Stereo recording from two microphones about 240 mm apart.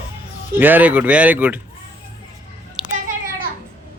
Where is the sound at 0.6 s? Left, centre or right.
Centre.